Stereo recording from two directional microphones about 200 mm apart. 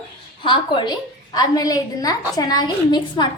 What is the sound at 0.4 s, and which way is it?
A woman's voice, 25° left (ahead or behind).